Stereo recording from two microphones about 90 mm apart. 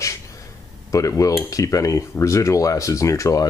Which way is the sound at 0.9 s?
35° left (ahead or behind).